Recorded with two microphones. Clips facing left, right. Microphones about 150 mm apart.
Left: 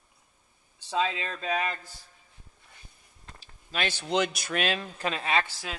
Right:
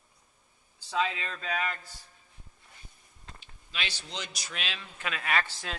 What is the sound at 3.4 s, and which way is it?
A man's voice, 45° left (ahead or behind).